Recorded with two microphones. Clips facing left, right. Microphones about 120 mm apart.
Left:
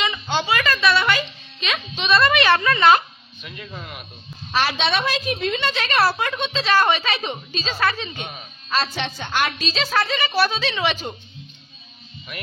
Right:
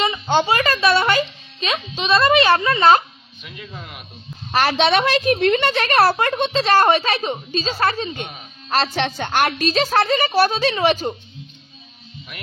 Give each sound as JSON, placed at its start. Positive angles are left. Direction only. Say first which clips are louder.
{"t": 0.0, "sound": "a woman's voice", "louder": "right 5 dB", "side_deg": -40}
{"t": 4.5, "sound": "a woman's voice", "louder": "right 5 dB", "side_deg": -50}